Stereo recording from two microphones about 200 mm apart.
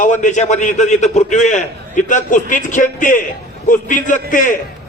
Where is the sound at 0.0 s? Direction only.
40° left (ahead or behind).